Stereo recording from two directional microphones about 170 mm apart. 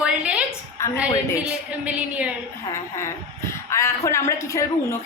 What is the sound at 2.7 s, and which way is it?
A woman's voice, 15° left (ahead or behind).